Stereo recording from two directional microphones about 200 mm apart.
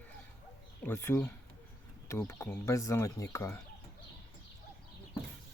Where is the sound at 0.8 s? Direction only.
10° left (ahead or behind).